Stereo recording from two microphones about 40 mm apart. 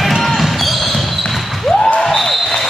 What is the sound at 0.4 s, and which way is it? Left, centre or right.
Basketball bounce, centre.